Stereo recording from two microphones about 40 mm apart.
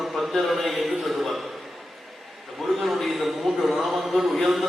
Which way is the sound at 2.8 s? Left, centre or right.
Centre.